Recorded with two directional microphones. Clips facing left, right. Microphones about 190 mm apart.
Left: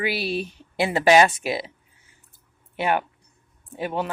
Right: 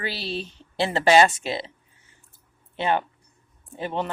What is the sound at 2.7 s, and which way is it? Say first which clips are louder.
Speech: left 1 dB; 10° left (ahead or behind).